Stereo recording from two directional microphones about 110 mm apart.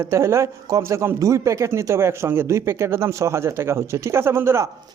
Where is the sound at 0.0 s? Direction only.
25° right (ahead or behind).